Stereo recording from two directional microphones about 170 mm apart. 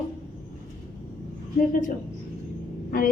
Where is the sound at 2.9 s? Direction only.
55° left (ahead or behind).